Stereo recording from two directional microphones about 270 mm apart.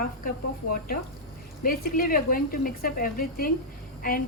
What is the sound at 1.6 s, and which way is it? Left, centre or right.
A woman's voice, left.